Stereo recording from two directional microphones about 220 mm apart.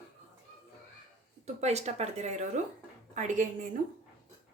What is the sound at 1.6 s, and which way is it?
A woman's voice, 30° right (ahead or behind).